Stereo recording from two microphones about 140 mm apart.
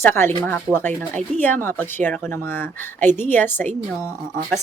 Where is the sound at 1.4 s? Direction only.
15° left (ahead or behind).